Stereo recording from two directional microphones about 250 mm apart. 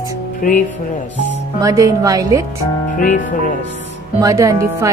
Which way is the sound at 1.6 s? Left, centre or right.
Centre.